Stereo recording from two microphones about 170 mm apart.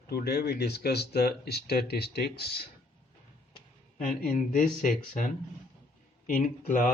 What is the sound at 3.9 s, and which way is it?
Speech, 50° left (ahead or behind).